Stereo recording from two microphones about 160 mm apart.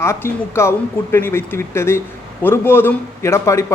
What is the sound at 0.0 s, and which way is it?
A man's voice, 15° left (ahead or behind).